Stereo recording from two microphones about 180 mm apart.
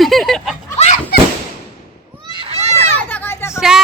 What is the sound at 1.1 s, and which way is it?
Fireworks, 60° left (ahead or behind).